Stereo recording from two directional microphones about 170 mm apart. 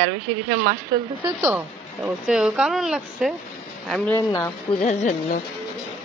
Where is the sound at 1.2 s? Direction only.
15° right (ahead or behind).